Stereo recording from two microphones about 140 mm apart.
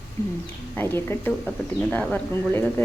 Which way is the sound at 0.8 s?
15° left (ahead or behind).